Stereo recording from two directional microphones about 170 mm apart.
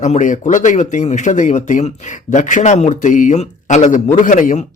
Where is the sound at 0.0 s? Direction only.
45° left (ahead or behind).